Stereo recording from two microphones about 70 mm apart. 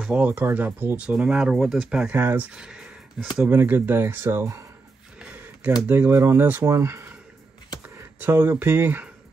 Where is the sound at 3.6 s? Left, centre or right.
Right.